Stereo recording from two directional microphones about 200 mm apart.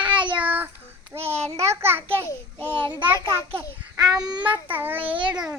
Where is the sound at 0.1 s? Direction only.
25° right (ahead or behind).